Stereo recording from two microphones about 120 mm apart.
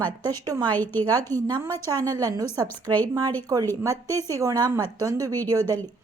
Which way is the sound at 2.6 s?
15° left (ahead or behind).